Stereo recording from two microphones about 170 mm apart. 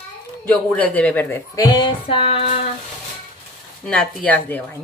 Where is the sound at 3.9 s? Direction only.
5° left (ahead or behind).